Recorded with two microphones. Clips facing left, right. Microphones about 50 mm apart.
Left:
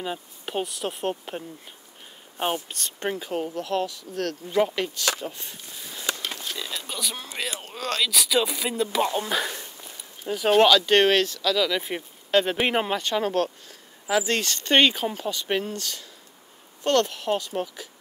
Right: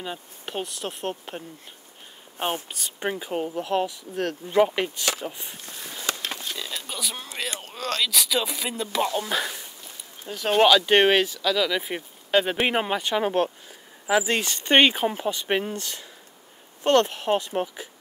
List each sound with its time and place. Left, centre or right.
0.0 s speech: centre
6.6 s speech: centre
10.6 s speech: centre